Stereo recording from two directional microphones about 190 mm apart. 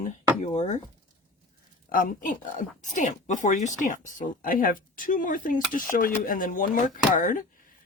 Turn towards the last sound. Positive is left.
turn(degrees=45)  # may be behind; listen again after turning